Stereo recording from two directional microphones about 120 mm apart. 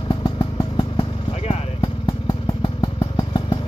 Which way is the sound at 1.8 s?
45° left (ahead or behind).